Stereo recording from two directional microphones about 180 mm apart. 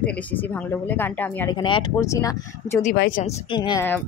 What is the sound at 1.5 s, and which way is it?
Speech, 25° left (ahead or behind).